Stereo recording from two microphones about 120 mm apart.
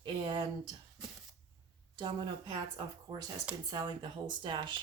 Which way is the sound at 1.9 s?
40° right (ahead or behind).